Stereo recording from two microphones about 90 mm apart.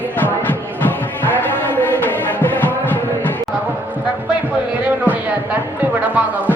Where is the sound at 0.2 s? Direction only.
20° left (ahead or behind).